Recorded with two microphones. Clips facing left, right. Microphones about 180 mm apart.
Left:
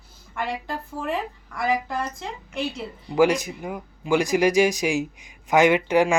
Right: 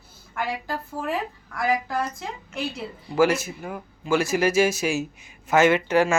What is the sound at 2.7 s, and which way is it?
Speech, 15° left (ahead or behind).